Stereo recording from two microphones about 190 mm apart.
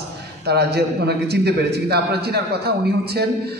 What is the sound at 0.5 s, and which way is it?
A man's voice, 60° right (ahead or behind).